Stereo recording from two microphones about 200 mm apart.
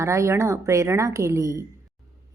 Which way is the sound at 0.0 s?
15° right (ahead or behind).